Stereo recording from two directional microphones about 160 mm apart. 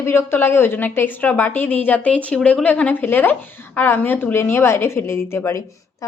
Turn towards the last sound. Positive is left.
turn(degrees=15)  # may be behind; listen again after turning